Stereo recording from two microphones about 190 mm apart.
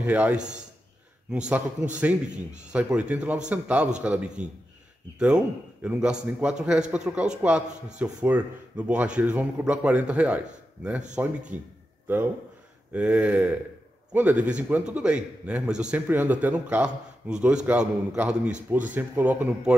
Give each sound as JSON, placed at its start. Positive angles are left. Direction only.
{"t": 0.0, "sound": "a man's voice", "side_deg": -10}
{"t": 1.8, "sound": "a man's voice", "side_deg": -5}
{"t": 12.9, "sound": "a man's voice", "side_deg": -5}